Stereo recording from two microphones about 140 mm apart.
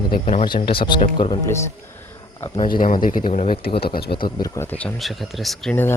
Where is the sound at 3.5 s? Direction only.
90° left.